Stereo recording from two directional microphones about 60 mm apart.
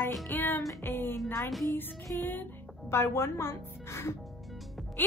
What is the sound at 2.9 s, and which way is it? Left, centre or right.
Speech, left.